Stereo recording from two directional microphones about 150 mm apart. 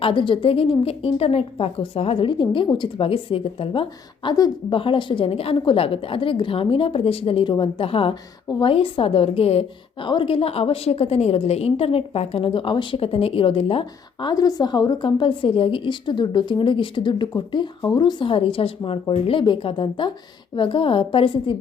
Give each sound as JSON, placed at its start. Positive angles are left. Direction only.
{"t": 0.0, "sound": "a woman's voice", "side_deg": 35}
{"t": 8.4, "sound": "a woman's voice", "side_deg": 25}
{"t": 8.7, "sound": "a woman's voice", "side_deg": 40}